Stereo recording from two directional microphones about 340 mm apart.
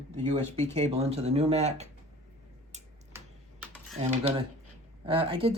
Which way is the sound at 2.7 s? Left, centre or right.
Centre.